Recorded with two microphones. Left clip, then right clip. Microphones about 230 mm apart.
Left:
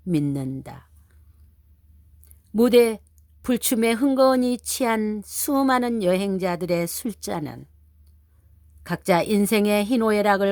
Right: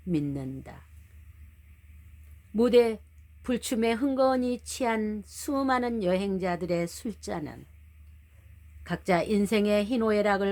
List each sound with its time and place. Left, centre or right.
0.1 s speech: left
2.6 s speech: left
8.8 s speech: left